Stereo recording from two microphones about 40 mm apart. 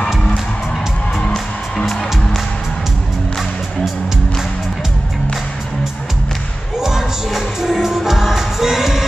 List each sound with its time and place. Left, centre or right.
1.2 s music: left
6.8 s music: centre